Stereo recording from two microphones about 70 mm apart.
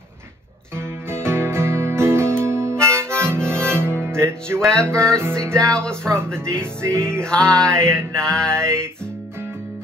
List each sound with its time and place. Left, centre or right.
0.7 s music: right
5.7 s mantra: centre
6.0 s music: right
7.2 s mantra: centre
8.5 s music: right